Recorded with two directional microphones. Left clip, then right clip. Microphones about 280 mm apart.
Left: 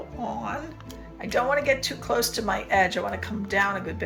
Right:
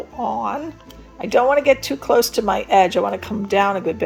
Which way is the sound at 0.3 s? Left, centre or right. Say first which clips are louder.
Right 9 dB; centre.